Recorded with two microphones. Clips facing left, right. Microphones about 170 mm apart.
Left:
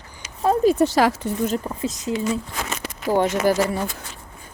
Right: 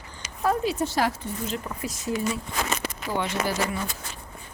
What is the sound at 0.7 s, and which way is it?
Speech, 85° left.